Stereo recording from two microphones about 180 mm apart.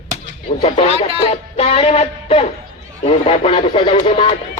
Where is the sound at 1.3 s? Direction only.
35° left (ahead or behind).